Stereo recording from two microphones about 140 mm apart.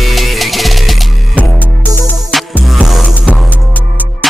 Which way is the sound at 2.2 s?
5° right (ahead or behind).